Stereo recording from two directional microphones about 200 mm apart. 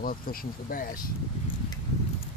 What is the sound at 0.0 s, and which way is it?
Speech, 45° left (ahead or behind).